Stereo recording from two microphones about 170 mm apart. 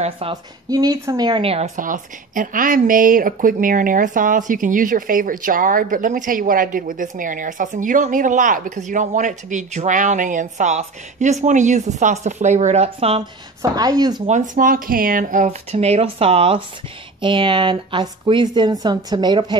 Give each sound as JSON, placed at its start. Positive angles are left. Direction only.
{"t": 0.3, "sound": "speech", "side_deg": -20}
{"t": 1.8, "sound": "speech", "side_deg": -50}
{"t": 13.6, "sound": "speech", "side_deg": -20}
{"t": 14.2, "sound": "speech", "side_deg": -45}